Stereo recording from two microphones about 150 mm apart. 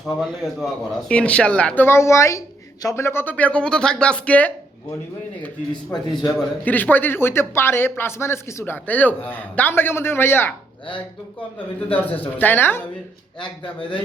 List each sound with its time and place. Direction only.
0.0 s a man's voice: centre (ahead or behind)
5.7 s a man's voice: 30° left (ahead or behind)
6.2 s a man's voice: 10° left (ahead or behind)
12.4 s a man's voice: 15° left (ahead or behind)